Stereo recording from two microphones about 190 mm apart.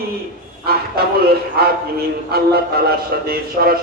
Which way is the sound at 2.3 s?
55° right (ahead or behind).